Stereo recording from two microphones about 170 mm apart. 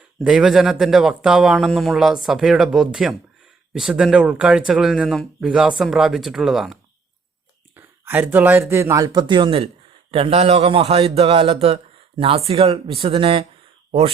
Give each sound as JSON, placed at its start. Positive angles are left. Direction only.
{"t": 0.2, "sound": "speech", "side_deg": -5}
{"t": 7.8, "sound": "a man's voice", "side_deg": -15}